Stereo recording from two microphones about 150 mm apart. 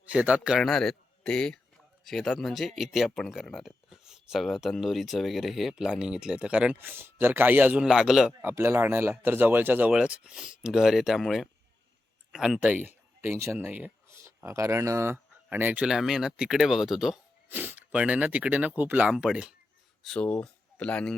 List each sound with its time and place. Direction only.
0.0 s a man's voice: 10° right (ahead or behind)
8.4 s speech: 15° right (ahead or behind)
17.5 s speech: 15° right (ahead or behind)
20.0 s speech: 5° left (ahead or behind)